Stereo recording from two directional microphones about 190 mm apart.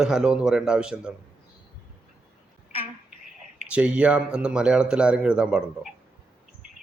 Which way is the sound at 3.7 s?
5° right (ahead or behind).